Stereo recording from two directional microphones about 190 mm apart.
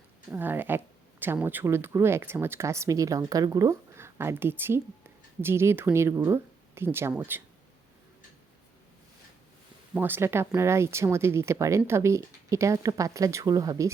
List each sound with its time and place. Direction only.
0.3 s speech: 10° right (ahead or behind)
9.9 s speech: 10° right (ahead or behind)